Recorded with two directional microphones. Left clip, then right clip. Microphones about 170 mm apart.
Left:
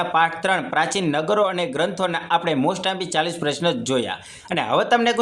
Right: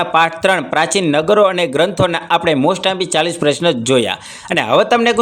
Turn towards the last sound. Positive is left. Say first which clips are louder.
# right 6 dB
turn(degrees=-35)  # may be behind; listen again after turning